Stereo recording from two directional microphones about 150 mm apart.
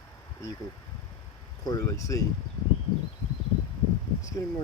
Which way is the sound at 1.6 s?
20° left (ahead or behind).